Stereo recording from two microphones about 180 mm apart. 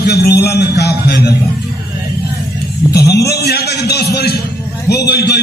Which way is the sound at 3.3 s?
60° left (ahead or behind).